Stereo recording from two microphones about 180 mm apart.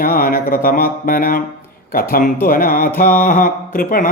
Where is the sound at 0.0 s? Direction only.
55° left (ahead or behind).